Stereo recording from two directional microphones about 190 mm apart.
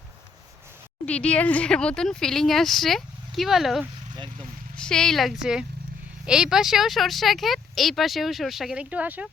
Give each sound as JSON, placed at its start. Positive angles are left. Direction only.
{"t": 1.0, "sound": "speech", "side_deg": 5}
{"t": 4.1, "sound": "speech", "side_deg": -25}
{"t": 4.8, "sound": "speech", "side_deg": 5}